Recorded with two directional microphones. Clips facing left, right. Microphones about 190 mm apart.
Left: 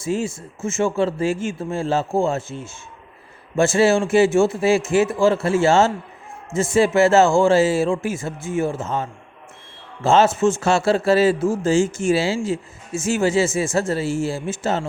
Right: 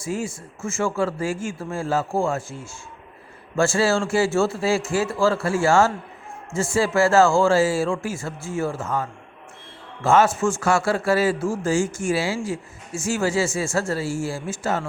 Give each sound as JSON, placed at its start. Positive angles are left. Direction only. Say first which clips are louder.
{"t": 0.0, "sound": "a man's voice", "louder": "left 4 dB", "side_deg": 25}